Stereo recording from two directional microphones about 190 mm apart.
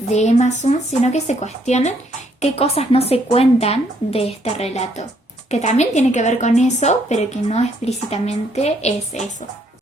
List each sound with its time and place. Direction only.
0.1 s a woman's voice: 35° left (ahead or behind)